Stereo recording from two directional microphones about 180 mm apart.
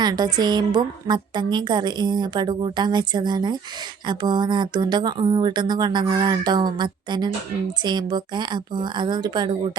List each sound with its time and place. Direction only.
0.0 s a woman's voice: 25° right (ahead or behind)